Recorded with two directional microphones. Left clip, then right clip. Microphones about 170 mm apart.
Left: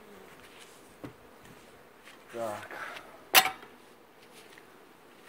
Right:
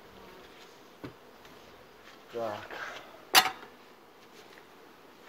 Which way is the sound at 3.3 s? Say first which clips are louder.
Even; 30° left (ahead or behind).